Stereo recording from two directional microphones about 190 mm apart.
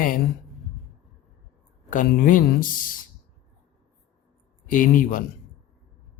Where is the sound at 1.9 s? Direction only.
45° left (ahead or behind).